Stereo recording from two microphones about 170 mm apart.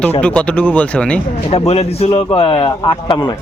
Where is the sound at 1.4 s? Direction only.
35° left (ahead or behind).